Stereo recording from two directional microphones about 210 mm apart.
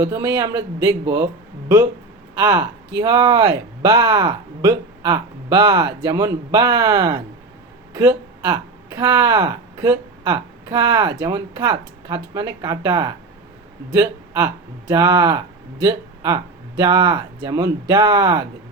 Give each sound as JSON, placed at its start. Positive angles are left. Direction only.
{"t": 0.0, "sound": "speech", "side_deg": -15}